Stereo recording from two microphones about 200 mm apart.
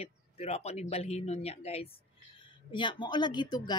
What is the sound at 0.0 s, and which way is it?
A woman's voice, 30° left (ahead or behind).